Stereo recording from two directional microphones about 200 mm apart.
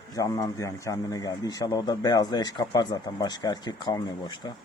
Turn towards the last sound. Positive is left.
turn(degrees=20)  # may be behind; listen again after turning